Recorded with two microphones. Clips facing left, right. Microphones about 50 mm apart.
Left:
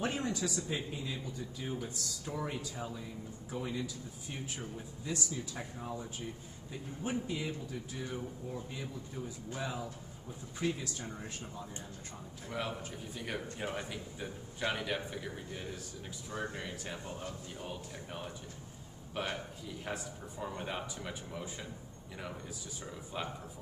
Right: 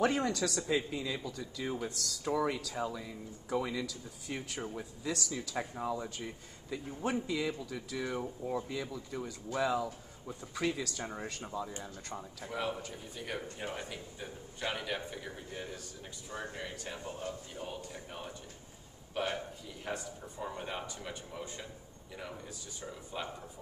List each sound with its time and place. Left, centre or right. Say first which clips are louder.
0.0 s speech: right 5 dB; right
4.7 s speech: right 1 dB; right
6.7 s speech: right 3 dB; right
8.9 s speech: right 3 dB; right
10.2 s speech: right 1 dB; right
12.4 s a man's voice: right 2 dB; centre
23.2 s a man's voice: left 1 dB; centre